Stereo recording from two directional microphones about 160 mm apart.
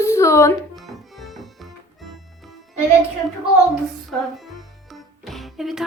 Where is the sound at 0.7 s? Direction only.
Centre (ahead or behind).